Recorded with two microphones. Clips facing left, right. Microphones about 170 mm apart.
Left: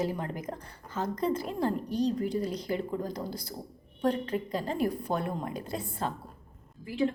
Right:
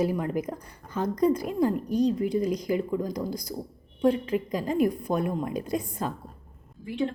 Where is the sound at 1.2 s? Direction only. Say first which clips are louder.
Right 7 dB; 25° left (ahead or behind).